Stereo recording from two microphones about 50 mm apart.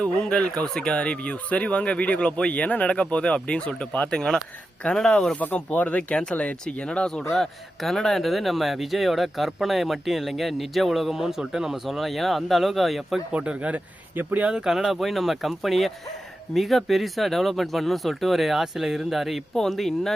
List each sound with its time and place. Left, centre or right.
0.0 s speech: centre
4.1 s speech: centre
5.5 s speech: left
7.8 s speech: centre
13.3 s speech: right
14.5 s speech: centre
14.8 s speech: centre